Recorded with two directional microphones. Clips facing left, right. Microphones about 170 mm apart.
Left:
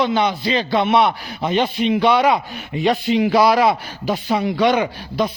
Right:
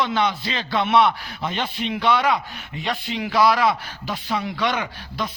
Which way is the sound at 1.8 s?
5° left (ahead or behind).